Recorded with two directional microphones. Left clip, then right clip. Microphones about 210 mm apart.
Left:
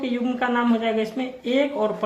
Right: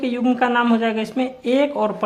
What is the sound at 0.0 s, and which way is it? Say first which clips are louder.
Speech: right 5 dB; 45° right (ahead or behind).